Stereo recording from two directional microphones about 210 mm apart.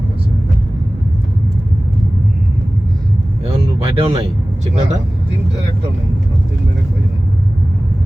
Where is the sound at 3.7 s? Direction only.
25° right (ahead or behind).